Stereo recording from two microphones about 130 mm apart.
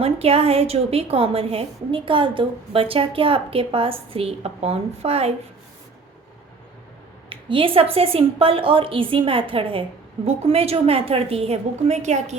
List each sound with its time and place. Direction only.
0.0 s a woman's voice: 50° right (ahead or behind)
7.3 s a woman's voice: 40° right (ahead or behind); by 12.4 s 60° right (ahead or behind)